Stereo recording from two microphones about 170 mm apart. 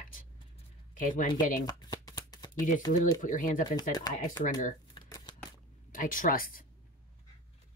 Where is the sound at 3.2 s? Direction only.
50° left (ahead or behind).